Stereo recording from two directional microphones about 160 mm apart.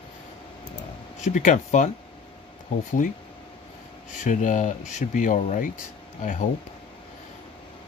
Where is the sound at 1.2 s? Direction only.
50° left (ahead or behind).